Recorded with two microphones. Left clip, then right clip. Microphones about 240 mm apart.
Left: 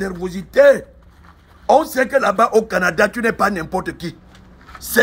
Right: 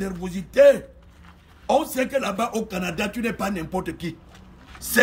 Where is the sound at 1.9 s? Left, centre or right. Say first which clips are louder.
Left 9 dB; centre.